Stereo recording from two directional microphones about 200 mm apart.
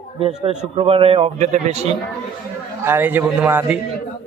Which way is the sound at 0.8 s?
30° right (ahead or behind).